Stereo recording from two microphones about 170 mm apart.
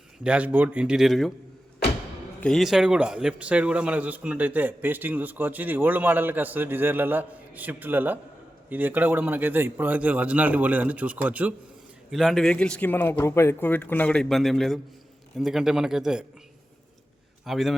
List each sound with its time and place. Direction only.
0.2 s a man's voice: 5° right (ahead or behind)
2.4 s a man's voice: centre (ahead or behind)
17.4 s a man's voice: centre (ahead or behind)